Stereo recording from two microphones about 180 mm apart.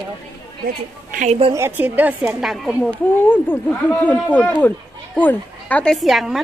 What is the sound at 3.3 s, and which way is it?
Speech, 10° left (ahead or behind).